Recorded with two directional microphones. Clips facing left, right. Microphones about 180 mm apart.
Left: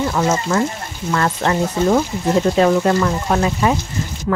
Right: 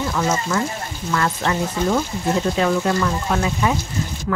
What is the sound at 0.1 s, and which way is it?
Speech, 45° left (ahead or behind).